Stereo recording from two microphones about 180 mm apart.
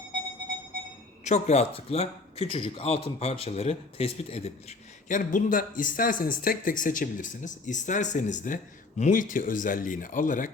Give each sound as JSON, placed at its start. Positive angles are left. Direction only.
{"t": 1.2, "sound": "a man's voice", "side_deg": 40}
{"t": 5.0, "sound": "speech", "side_deg": 45}